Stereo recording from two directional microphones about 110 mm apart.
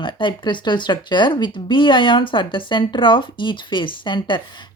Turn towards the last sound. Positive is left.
turn(degrees=45)  # may be behind; listen again after turning